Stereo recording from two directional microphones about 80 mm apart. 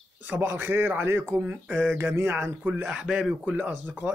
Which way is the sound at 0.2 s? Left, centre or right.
Right.